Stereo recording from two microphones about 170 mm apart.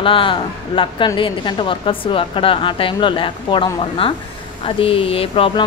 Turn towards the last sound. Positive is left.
turn(degrees=30)  # may be behind; listen again after turning